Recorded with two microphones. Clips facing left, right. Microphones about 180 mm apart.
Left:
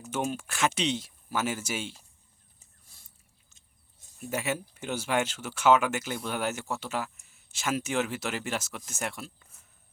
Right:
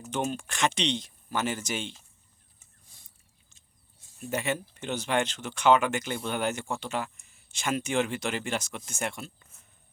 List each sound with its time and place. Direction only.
0.1 s speech: 5° left (ahead or behind)
4.2 s speech: 5° left (ahead or behind)